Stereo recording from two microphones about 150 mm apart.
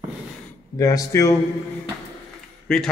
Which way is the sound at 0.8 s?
25° left (ahead or behind).